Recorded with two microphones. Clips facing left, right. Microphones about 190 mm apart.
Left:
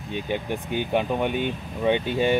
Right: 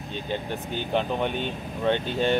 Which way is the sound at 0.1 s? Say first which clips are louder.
Left 3 dB; 15° left (ahead or behind).